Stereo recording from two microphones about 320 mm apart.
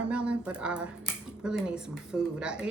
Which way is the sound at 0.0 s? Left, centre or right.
Centre.